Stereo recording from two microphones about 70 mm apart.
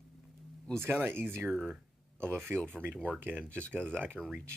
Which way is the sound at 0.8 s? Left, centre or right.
Right.